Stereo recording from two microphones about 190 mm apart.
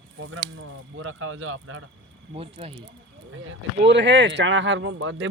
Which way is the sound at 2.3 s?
30° right (ahead or behind).